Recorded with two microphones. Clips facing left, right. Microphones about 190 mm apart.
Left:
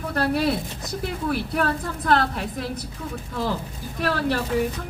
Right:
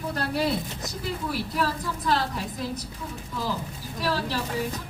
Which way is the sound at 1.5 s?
60° left (ahead or behind).